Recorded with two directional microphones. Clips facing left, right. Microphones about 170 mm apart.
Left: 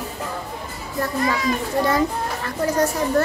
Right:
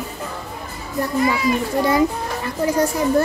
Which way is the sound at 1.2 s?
10° right (ahead or behind).